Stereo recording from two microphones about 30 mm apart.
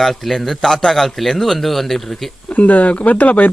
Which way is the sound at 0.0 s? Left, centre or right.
Centre.